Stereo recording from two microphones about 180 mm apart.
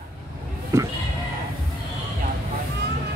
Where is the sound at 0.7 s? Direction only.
15° right (ahead or behind).